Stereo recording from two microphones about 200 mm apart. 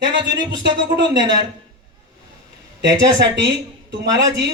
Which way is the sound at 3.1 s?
65° right (ahead or behind).